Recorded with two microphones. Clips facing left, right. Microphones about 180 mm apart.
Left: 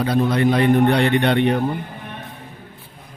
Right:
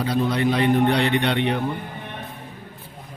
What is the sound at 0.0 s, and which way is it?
A man's voice, 55° left (ahead or behind).